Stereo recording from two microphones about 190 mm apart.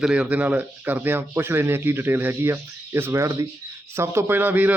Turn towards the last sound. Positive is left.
turn(degrees=-10)  # may be behind; listen again after turning